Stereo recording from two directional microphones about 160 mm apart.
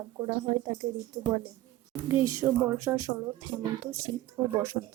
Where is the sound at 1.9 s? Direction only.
20° right (ahead or behind).